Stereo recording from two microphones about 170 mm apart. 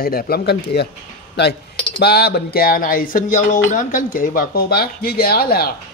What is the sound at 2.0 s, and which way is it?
Dishes, 70° left (ahead or behind).